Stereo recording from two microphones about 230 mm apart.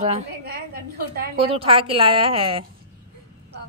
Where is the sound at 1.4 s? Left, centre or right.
Right.